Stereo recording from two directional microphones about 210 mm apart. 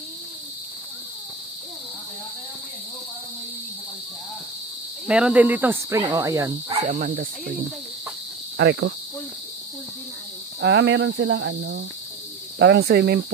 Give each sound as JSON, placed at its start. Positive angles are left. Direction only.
{"t": 5.0, "sound": "speech", "side_deg": -5}
{"t": 6.8, "sound": "speech", "side_deg": -35}
{"t": 8.5, "sound": "cricket", "side_deg": -60}
{"t": 10.6, "sound": "cricket", "side_deg": -60}
{"t": 12.5, "sound": "speech", "side_deg": -55}